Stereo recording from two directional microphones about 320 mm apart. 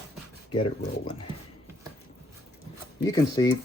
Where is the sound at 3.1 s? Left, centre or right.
Centre.